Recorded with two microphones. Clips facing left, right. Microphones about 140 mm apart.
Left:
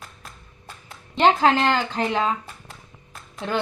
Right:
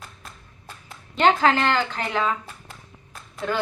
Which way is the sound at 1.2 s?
25° left (ahead or behind).